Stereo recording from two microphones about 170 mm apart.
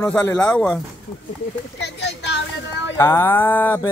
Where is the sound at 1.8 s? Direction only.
90° left.